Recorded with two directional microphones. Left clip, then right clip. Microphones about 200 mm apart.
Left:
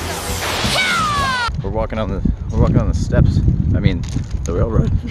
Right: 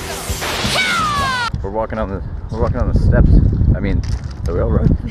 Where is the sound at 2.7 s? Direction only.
5° left (ahead or behind).